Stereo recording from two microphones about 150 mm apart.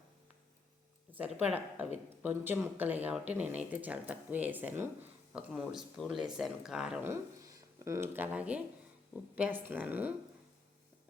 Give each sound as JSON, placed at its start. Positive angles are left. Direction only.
{"t": 1.1, "sound": "speech", "side_deg": -10}
{"t": 7.0, "sound": "speech", "side_deg": -20}